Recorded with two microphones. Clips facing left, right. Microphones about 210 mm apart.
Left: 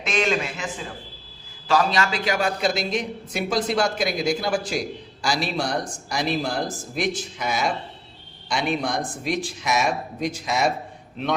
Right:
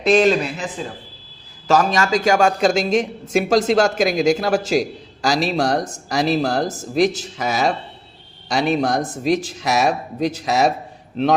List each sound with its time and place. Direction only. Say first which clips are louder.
0.0 s a man's voice: right 9 dB; 35° right (ahead or behind)
3.3 s speech: right 8 dB; 90° right
5.7 s speech: right 6 dB; 40° right (ahead or behind)